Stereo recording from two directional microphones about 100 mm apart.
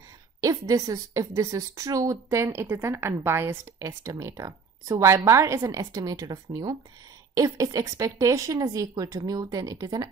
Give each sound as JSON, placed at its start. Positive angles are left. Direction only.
{"t": 0.4, "sound": "a woman's voice", "side_deg": -35}